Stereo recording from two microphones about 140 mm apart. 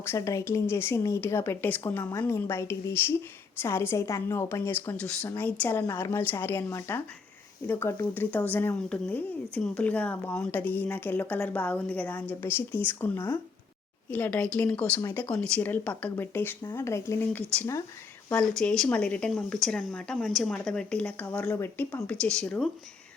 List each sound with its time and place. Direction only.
0.0 s a woman's voice: 20° left (ahead or behind)
18.3 s speech: 5° left (ahead or behind)